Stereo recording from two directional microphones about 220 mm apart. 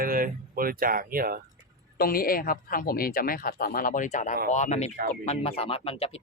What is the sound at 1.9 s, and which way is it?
Speech, 40° left (ahead or behind).